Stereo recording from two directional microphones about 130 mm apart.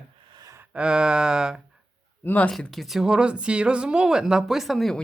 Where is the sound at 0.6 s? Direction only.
10° right (ahead or behind).